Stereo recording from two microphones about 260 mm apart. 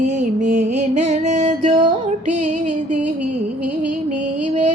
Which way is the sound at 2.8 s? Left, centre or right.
Right.